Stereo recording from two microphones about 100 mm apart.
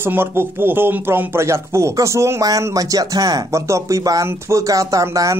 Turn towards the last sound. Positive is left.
turn(degrees=-35)  # may be behind; listen again after turning